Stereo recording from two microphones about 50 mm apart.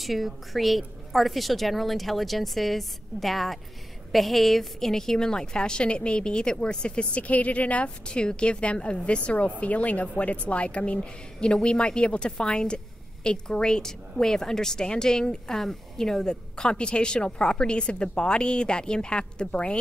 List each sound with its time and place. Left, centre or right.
0.0 s a woman's voice: centre; by 19.8 s left